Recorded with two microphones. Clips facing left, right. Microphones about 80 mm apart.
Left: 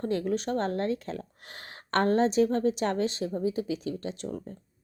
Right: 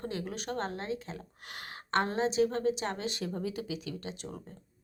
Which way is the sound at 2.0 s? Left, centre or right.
Left.